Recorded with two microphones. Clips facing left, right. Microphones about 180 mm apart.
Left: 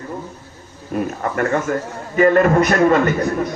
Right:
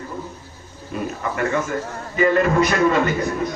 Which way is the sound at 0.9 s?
50° left (ahead or behind).